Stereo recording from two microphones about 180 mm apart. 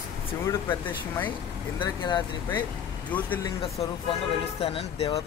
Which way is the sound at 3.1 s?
10° left (ahead or behind).